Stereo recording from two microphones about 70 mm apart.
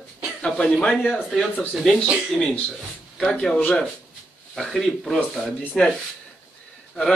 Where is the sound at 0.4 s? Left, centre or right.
Centre.